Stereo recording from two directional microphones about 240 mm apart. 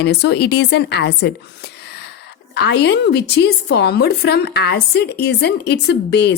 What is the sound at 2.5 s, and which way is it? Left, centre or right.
A woman's voice, left.